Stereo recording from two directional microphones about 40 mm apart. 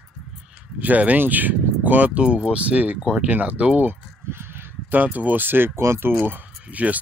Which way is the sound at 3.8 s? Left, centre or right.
Right.